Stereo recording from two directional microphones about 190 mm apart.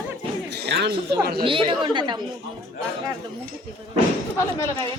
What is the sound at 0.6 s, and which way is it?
Speech, 60° right (ahead or behind).